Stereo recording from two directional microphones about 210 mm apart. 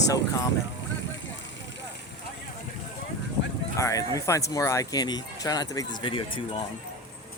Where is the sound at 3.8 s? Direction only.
15° left (ahead or behind).